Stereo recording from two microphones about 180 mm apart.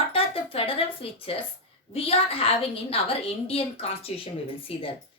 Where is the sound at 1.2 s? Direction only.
30° left (ahead or behind).